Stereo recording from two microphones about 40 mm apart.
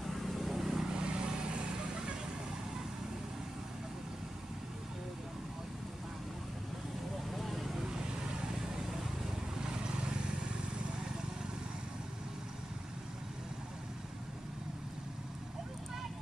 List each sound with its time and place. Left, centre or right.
0.0 s vehicle: centre
0.8 s vehicle: right
7.3 s vehicle: centre
9.6 s vehicle: right